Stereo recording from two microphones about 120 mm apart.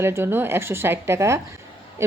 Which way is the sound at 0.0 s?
20° right (ahead or behind).